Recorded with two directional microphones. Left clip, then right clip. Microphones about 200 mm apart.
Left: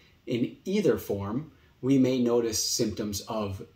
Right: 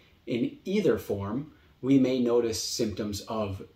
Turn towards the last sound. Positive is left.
turn(degrees=15)  # may be behind; listen again after turning